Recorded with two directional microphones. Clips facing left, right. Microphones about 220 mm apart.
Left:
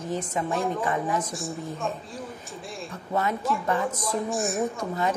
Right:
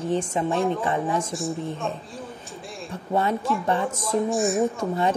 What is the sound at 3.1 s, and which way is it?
Speech, 30° right (ahead or behind).